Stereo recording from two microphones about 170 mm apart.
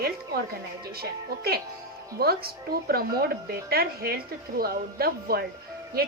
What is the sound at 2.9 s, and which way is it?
Speech, 65° right (ahead or behind).